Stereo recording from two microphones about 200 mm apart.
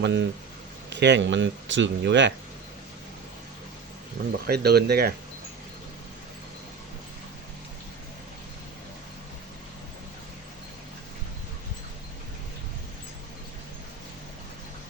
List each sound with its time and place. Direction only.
0.0 s speech: 60° right (ahead or behind)
4.4 s speech: 50° right (ahead or behind)